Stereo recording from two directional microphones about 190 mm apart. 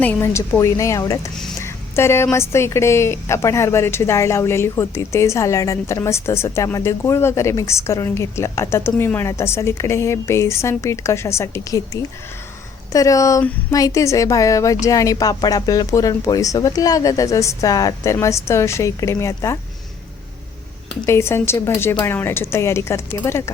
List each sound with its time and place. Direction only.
0.0 s a woman's voice: 10° left (ahead or behind)
12.9 s a woman's voice: 15° left (ahead or behind)
21.1 s a woman's voice: 15° left (ahead or behind)